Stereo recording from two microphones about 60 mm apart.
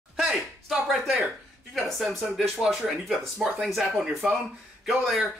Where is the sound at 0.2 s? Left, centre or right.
Centre.